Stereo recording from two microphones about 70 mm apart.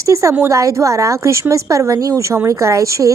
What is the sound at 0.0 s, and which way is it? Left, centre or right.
A woman's voice, right.